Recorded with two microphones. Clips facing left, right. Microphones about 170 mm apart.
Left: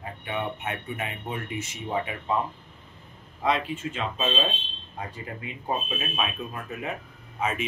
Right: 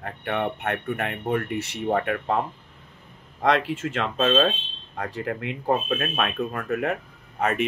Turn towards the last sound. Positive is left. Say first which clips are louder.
# right 4 dB
turn(degrees=-65)  # may be behind; listen again after turning